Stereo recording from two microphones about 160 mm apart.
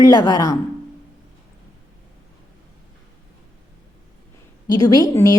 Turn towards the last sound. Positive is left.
turn(degrees=20)  # may be behind; listen again after turning